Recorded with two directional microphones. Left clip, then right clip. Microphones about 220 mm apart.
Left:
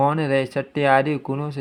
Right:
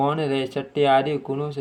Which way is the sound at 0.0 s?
30° left (ahead or behind).